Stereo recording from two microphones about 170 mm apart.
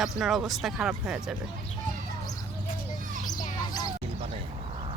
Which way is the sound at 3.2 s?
25° left (ahead or behind).